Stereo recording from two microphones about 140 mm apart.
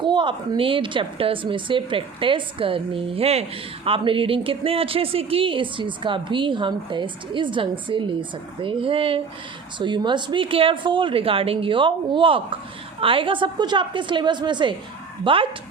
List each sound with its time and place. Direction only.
0.0 s speech: 35° right (ahead or behind)